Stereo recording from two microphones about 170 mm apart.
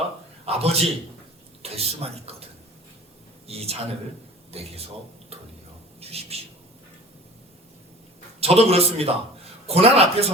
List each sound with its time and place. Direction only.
0.4 s a man's voice: 35° right (ahead or behind)
3.4 s a man's voice: 35° right (ahead or behind)
5.3 s a sound: 35° right (ahead or behind)
6.0 s a man's voice: 35° right (ahead or behind)
8.4 s a man's voice: 35° right (ahead or behind)